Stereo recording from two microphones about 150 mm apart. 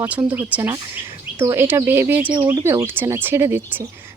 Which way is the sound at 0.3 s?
10° right (ahead or behind).